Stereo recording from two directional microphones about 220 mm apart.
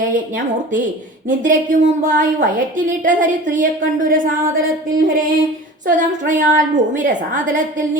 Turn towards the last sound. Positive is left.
turn(degrees=-35)  # may be behind; listen again after turning